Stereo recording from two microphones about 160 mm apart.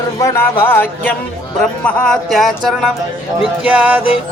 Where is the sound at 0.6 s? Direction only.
10° left (ahead or behind).